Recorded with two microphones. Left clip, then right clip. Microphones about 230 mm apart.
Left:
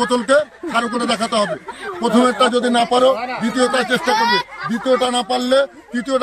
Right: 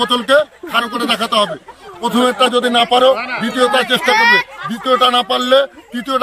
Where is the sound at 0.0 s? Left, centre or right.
Centre.